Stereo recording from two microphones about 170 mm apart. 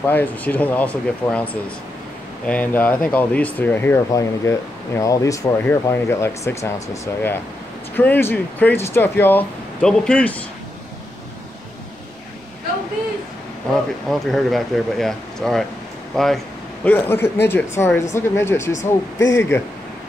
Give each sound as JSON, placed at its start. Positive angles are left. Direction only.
{"t": 0.0, "sound": "speech", "side_deg": 10}
{"t": 14.0, "sound": "speech", "side_deg": 0}